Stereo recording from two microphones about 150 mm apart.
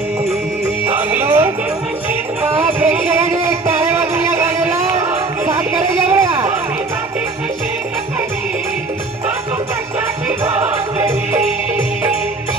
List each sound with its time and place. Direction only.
0.3 s music: 15° right (ahead or behind)
5.5 s a sound: 20° right (ahead or behind)
10.4 s music: 15° right (ahead or behind)